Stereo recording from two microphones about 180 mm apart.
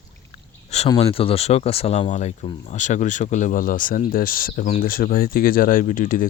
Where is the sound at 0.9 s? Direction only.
30° left (ahead or behind).